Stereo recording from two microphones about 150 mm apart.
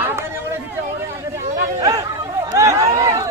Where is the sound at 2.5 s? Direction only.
20° right (ahead or behind).